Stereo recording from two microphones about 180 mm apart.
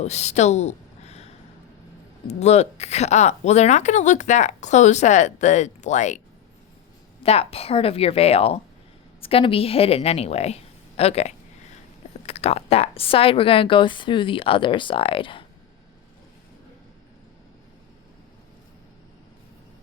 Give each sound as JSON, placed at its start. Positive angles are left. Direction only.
{"t": 0.0, "sound": "a woman's voice", "side_deg": 40}
{"t": 2.4, "sound": "a woman's voice", "side_deg": 35}